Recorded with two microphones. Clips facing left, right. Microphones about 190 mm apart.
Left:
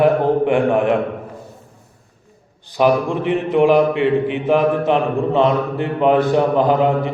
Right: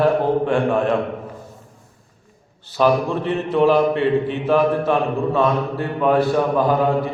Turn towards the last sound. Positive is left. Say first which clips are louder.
# left 2 dB
turn(degrees=20)  # may be behind; listen again after turning